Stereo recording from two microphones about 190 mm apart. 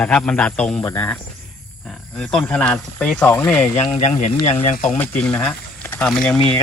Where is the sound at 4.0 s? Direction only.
40° left (ahead or behind).